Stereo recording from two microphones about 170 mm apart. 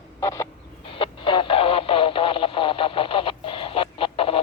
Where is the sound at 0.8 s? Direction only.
30° left (ahead or behind).